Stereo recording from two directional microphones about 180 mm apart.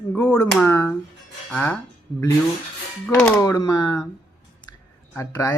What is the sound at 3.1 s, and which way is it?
Speech, 5° left (ahead or behind).